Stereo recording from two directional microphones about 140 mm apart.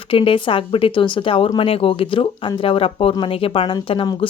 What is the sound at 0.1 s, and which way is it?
Speech, 40° left (ahead or behind).